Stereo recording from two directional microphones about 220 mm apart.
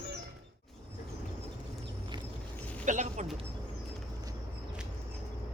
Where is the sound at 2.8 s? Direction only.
35° right (ahead or behind).